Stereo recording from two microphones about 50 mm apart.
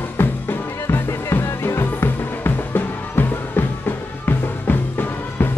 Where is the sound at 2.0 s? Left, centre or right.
Left.